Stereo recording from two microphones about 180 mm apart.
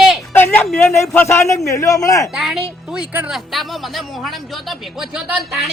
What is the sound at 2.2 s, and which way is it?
A woman's voice, centre (ahead or behind).